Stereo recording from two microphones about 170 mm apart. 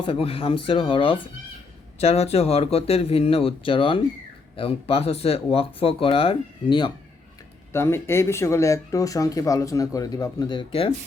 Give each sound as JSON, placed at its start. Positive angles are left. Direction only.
{"t": 0.0, "sound": "speech", "side_deg": 30}
{"t": 7.7, "sound": "speech", "side_deg": 15}